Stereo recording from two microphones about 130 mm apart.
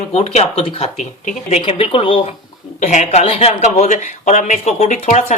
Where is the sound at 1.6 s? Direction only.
45° left (ahead or behind).